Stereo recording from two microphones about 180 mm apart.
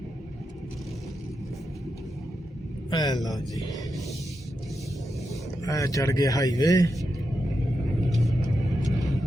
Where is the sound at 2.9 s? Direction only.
20° left (ahead or behind).